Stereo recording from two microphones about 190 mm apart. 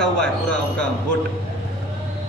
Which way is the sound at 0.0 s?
5° left (ahead or behind).